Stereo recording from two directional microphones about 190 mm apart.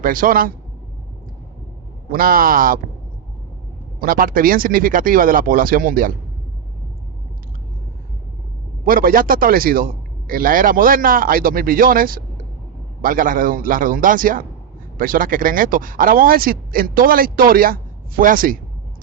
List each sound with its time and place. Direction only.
0.0 s a man's voice: 45° right (ahead or behind)
2.0 s a man's voice: 50° right (ahead or behind)
4.0 s a man's voice: 50° right (ahead or behind)
8.8 s a man's voice: 50° right (ahead or behind)